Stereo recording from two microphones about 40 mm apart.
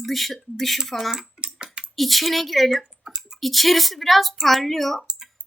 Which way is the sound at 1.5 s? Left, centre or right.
Right.